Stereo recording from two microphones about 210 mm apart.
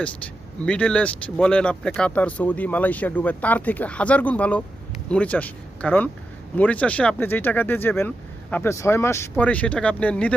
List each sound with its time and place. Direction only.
0.6 s speech: 5° left (ahead or behind)